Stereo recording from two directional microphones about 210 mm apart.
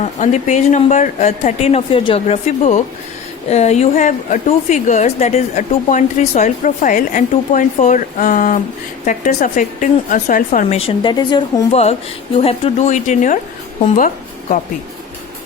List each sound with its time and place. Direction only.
0.0 s a woman's voice: 35° left (ahead or behind)